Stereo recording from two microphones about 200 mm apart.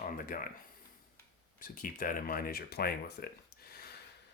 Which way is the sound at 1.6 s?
45° left (ahead or behind).